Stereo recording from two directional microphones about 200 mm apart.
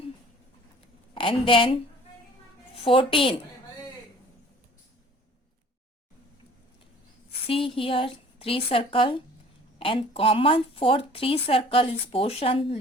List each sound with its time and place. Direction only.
1.1 s a woman's voice: 25° left (ahead or behind)
7.4 s a woman's voice: 25° left (ahead or behind)